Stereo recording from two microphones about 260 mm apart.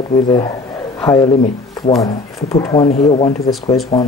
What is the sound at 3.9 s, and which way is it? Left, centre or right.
Speech, centre.